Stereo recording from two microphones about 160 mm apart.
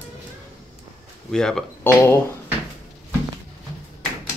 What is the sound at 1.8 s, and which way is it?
Speech, 15° left (ahead or behind).